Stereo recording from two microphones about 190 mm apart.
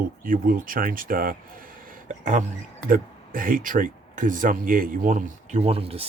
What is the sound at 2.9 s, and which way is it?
Speech, 45° right (ahead or behind).